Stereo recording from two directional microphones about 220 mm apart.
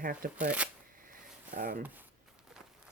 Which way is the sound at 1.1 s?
40° right (ahead or behind).